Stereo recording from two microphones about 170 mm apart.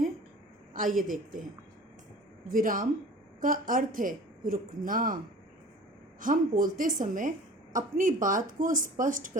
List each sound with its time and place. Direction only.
0.9 s a woman's voice: 50° right (ahead or behind)
2.5 s a woman's voice: 50° right (ahead or behind)